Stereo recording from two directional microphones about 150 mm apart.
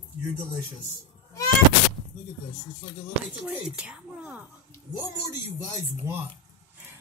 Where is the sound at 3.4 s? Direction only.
5° right (ahead or behind).